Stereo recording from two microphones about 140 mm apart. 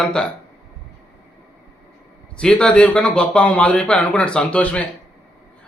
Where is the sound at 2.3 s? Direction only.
5° left (ahead or behind).